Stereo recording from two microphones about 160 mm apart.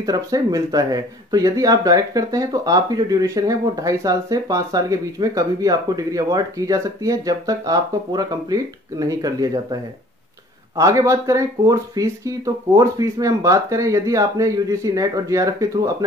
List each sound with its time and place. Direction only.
0.0 s speech: 20° right (ahead or behind)
10.8 s speech: 20° right (ahead or behind)